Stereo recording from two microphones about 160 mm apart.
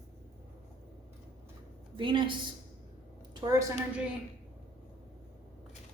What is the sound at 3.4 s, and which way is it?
Speech, 20° right (ahead or behind).